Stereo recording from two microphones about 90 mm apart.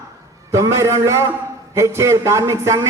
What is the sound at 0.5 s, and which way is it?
A man's voice, 35° right (ahead or behind).